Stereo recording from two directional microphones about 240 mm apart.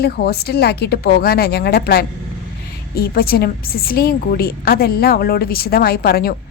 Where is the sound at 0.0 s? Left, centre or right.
Left.